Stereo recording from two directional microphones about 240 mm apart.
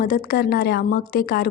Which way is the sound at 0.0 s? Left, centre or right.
Left.